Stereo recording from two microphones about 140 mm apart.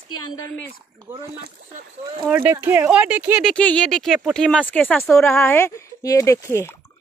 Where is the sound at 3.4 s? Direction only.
10° left (ahead or behind).